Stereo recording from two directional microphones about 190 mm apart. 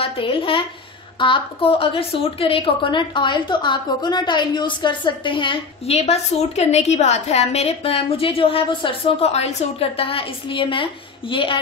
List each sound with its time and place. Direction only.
0.0 s a woman's voice: 30° left (ahead or behind)